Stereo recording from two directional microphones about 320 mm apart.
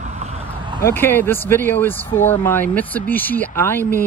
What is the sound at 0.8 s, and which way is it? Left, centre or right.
Speech, centre.